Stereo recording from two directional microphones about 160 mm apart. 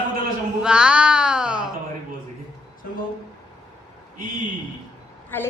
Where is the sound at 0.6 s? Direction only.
5° right (ahead or behind).